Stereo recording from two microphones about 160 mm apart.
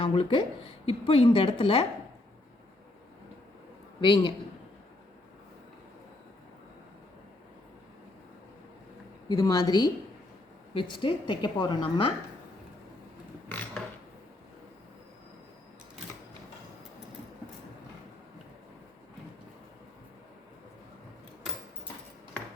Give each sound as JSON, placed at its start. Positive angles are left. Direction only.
{"t": 0.0, "sound": "a woman's voice", "side_deg": 30}
{"t": 4.0, "sound": "a woman's voice", "side_deg": 30}
{"t": 9.3, "sound": "a woman's voice", "side_deg": 25}
{"t": 13.5, "sound": "a sound", "side_deg": 10}